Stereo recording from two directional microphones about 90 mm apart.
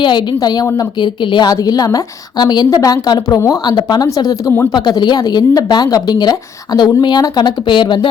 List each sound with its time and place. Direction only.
0.0 s a woman's voice: 55° left (ahead or behind)
1.5 s a woman's voice: 45° left (ahead or behind)
2.6 s a woman's voice: 40° left (ahead or behind)
4.7 s a woman's voice: 55° left (ahead or behind)